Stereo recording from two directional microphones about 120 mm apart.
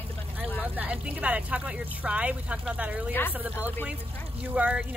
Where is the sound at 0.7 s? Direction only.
10° right (ahead or behind).